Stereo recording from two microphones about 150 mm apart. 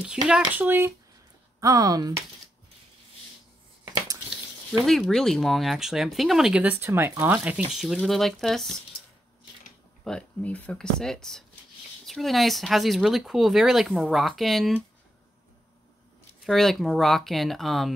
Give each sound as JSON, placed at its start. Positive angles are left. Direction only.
{"t": 0.3, "sound": "speech", "side_deg": -10}
{"t": 4.8, "sound": "speech", "side_deg": 0}
{"t": 10.0, "sound": "speech", "side_deg": 5}
{"t": 16.4, "sound": "speech", "side_deg": 0}